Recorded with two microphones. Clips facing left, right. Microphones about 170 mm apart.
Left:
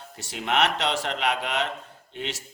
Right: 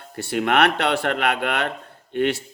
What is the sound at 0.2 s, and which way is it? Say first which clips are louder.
Speech: right 6 dB; 60° right (ahead or behind).